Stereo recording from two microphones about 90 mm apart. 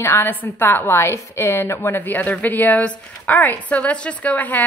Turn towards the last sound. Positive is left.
turn(degrees=15)  # may be behind; listen again after turning